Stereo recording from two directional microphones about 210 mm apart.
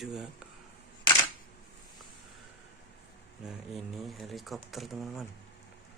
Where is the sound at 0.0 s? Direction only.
Centre (ahead or behind).